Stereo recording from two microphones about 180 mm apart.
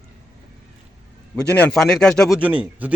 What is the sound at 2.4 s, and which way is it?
Speech, 10° right (ahead or behind).